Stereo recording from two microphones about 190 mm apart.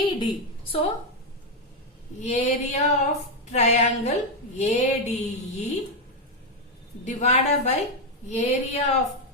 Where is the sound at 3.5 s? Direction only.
35° left (ahead or behind).